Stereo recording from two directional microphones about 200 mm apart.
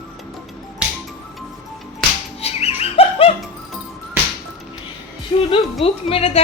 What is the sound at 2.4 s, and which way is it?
Music, 30° left (ahead or behind).